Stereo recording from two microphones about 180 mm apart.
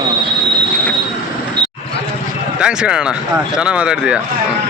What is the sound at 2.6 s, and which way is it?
Speech, 5° right (ahead or behind).